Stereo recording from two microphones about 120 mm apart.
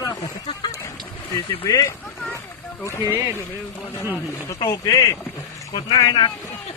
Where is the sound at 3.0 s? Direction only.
25° right (ahead or behind).